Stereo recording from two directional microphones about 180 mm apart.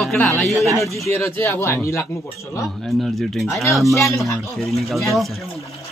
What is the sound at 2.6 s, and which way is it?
Speech, centre (ahead or behind).